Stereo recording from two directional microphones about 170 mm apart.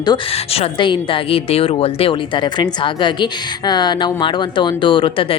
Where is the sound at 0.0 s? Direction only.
25° left (ahead or behind).